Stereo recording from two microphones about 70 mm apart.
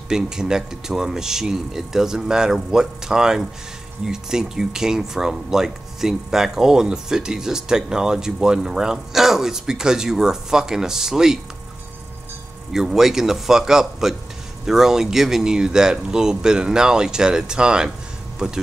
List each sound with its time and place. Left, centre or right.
0.1 s speech: centre
12.7 s speech: centre